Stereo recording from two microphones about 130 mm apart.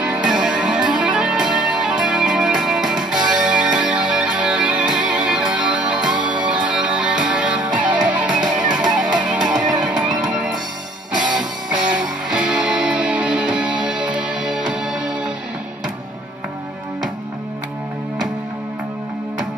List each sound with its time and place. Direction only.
0.0 s music: 10° right (ahead or behind)
6.1 s music: 35° right (ahead or behind)
6.4 s music: 10° right (ahead or behind)